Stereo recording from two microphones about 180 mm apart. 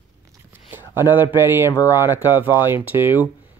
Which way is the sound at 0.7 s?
10° right (ahead or behind).